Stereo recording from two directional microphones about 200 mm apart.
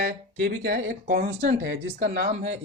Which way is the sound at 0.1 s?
60° right (ahead or behind).